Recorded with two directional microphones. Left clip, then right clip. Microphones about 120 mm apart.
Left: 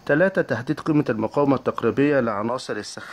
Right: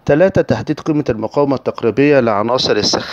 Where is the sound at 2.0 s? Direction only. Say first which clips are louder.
Right 10 dB; 60° right (ahead or behind).